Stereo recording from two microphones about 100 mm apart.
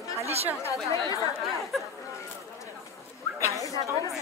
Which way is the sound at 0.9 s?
35° left (ahead or behind).